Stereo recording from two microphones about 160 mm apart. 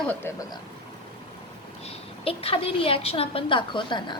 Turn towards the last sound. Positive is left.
turn(degrees=30)  # may be behind; listen again after turning